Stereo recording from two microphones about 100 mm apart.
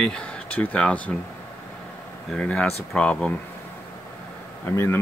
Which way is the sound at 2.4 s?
10° left (ahead or behind).